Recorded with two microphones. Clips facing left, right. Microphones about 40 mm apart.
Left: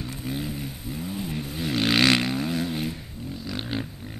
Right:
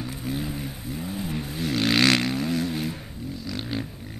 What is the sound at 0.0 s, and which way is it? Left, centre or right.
Vehicle, centre.